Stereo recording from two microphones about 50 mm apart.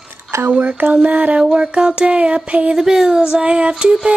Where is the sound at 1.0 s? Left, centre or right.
Right.